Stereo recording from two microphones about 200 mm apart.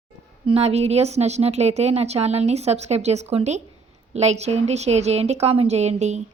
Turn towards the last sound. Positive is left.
turn(degrees=-35)  # may be behind; listen again after turning